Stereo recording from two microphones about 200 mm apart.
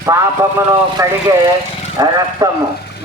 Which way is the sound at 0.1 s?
15° right (ahead or behind).